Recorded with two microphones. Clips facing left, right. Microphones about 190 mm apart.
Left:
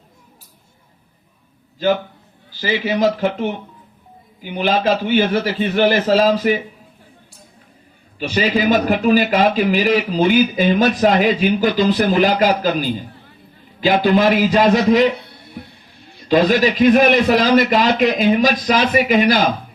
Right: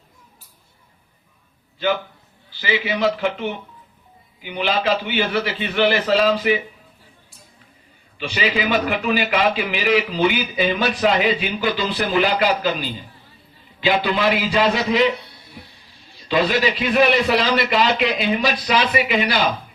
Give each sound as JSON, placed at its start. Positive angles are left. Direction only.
{"t": 2.5, "sound": "a man's voice", "side_deg": 40}
{"t": 8.2, "sound": "a man's voice", "side_deg": 40}
{"t": 16.1, "sound": "a man's voice", "side_deg": 45}